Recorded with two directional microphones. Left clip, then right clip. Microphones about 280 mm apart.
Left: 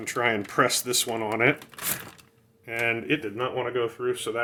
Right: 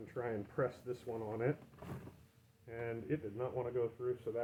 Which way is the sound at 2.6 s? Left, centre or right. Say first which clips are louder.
Left 16 dB; left.